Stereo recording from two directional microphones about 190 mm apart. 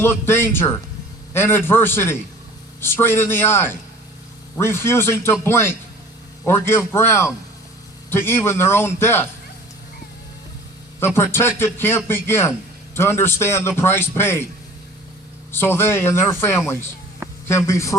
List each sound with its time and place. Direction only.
0.0 s a man's voice: 10° left (ahead or behind)
11.0 s a man's voice: 10° left (ahead or behind)
15.5 s a man's voice: 10° left (ahead or behind)